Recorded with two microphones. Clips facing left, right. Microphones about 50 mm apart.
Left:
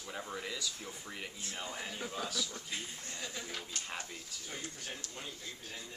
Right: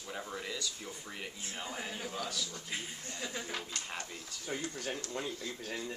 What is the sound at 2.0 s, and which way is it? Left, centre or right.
Speech, left.